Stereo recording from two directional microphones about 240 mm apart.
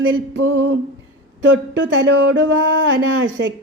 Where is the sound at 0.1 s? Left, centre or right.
Right.